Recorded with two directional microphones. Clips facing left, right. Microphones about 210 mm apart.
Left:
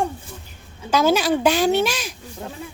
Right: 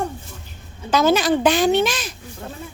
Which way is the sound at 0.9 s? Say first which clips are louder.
Right 1 dB; 10° left (ahead or behind).